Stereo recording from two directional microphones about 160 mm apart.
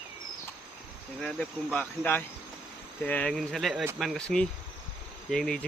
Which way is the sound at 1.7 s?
10° left (ahead or behind).